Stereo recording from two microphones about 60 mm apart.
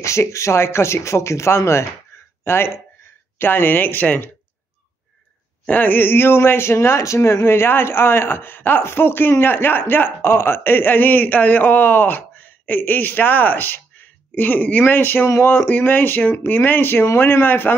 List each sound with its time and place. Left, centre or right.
0.0 s speech: left
5.7 s speech: left